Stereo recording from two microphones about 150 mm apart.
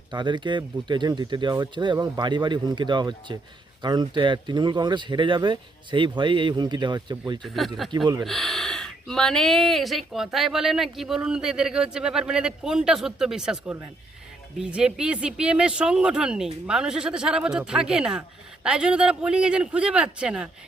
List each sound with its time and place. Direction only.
0.1 s speech: 30° right (ahead or behind)
7.4 s speech: centre (ahead or behind)
7.9 s speech: 30° right (ahead or behind)
8.2 s a man's voice: centre (ahead or behind)